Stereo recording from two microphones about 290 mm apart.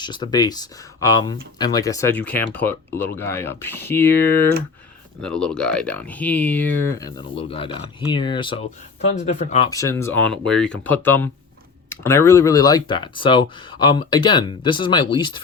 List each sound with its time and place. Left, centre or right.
0.0 s speech: centre
9.6 s speech: centre